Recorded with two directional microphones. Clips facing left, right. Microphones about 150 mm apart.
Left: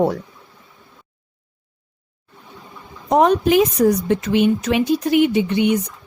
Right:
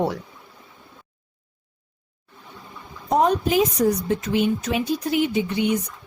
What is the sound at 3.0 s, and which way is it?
A woman's voice, 80° left.